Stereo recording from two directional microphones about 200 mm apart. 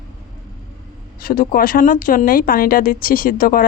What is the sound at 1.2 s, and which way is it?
A woman's voice, 45° left (ahead or behind).